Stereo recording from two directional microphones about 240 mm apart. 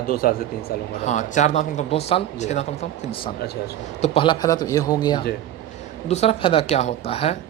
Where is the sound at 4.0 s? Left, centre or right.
Left.